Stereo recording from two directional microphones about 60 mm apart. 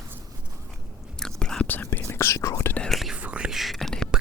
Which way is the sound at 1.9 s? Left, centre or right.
Left.